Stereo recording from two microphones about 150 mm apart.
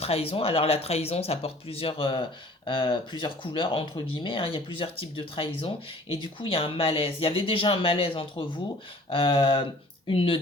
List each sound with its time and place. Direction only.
0.0 s speech: 40° left (ahead or behind)